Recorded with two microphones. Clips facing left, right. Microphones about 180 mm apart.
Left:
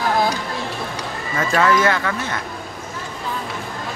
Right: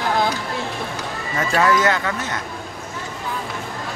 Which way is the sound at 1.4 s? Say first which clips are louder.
Left 1 dB; 20° right (ahead or behind).